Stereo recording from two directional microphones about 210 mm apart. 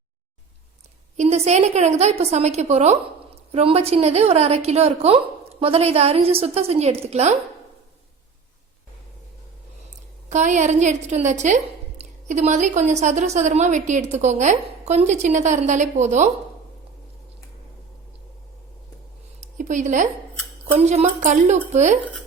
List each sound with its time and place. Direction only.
1.1 s a woman's voice: 30° right (ahead or behind)
10.2 s a woman's voice: 35° right (ahead or behind)
19.4 s a sound: 35° right (ahead or behind)
20.7 s a woman's voice: 30° right (ahead or behind)